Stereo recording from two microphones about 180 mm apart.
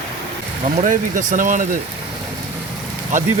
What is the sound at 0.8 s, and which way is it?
Speech, 45° right (ahead or behind).